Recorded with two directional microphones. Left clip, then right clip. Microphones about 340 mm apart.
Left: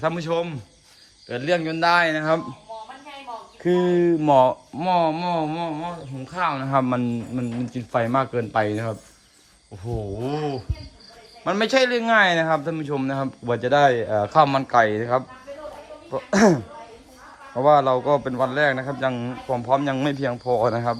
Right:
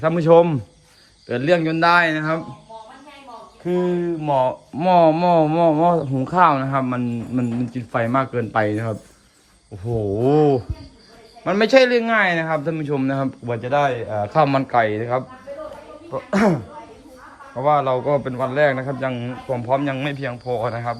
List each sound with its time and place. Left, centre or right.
0.0 s speech: centre
3.7 s speech: left
4.8 s speech: centre
10.2 s speech: centre
16.3 s speech: centre
17.7 s speech: centre